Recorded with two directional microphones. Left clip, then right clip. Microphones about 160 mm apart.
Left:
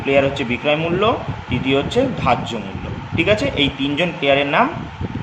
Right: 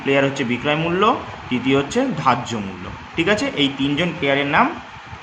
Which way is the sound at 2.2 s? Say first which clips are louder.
Even; 30° right (ahead or behind).